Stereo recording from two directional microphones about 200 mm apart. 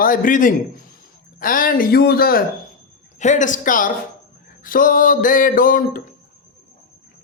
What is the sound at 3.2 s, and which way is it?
A man's voice, 35° left (ahead or behind).